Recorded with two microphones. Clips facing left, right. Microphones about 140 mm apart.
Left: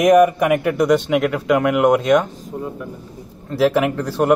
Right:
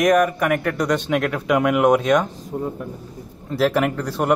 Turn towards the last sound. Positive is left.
turn(degrees=0)  # may be behind; listen again after turning